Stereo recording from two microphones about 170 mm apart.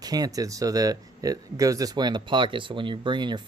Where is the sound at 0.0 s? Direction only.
20° right (ahead or behind).